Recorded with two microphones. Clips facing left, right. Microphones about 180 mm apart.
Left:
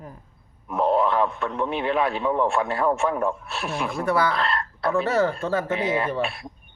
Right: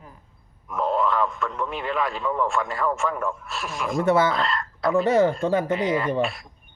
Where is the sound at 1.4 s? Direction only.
65° left (ahead or behind).